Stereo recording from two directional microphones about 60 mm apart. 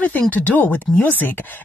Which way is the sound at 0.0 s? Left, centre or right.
Left.